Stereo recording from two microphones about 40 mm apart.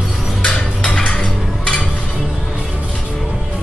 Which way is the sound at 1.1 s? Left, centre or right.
Left.